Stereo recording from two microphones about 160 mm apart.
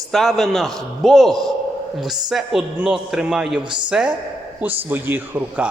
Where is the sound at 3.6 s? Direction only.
30° right (ahead or behind).